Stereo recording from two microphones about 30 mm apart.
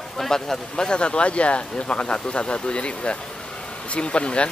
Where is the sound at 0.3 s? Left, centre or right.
Left.